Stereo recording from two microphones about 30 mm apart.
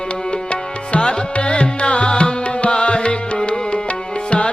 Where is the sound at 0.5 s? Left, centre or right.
Left.